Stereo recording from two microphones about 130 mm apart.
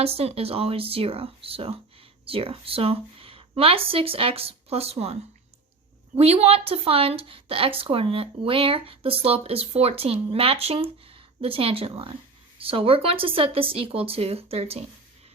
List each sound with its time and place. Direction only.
0.0 s speech: 50° right (ahead or behind)
6.1 s speech: 55° right (ahead or behind)